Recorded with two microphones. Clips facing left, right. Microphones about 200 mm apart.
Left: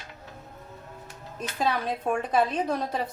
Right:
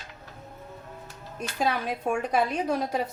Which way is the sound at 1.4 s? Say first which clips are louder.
Even; 10° right (ahead or behind).